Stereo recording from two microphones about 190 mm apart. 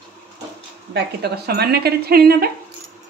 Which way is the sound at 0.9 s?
60° right (ahead or behind).